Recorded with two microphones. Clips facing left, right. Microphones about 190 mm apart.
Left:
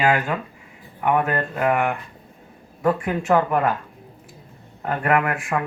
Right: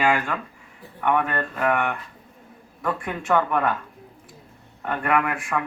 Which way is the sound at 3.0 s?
5° left (ahead or behind).